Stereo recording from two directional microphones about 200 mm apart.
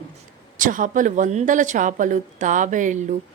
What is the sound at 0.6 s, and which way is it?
A woman's voice, 40° right (ahead or behind).